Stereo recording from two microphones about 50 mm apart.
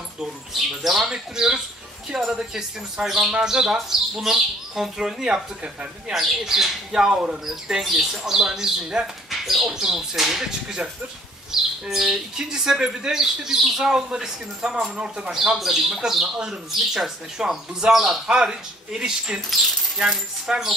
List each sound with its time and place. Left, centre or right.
0.7 s speech: centre
11.8 s speech: centre
15.5 s speech: centre
20.4 s speech: centre